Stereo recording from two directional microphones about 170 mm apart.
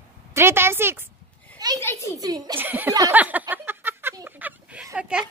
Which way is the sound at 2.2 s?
20° right (ahead or behind).